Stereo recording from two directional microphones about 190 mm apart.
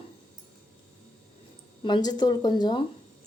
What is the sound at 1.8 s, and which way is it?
Speech, 25° left (ahead or behind).